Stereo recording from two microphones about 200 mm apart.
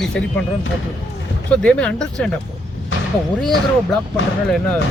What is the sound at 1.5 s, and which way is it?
Speech, 5° left (ahead or behind).